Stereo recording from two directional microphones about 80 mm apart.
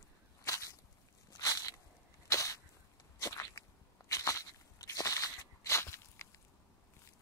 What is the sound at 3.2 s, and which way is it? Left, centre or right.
Biting, left.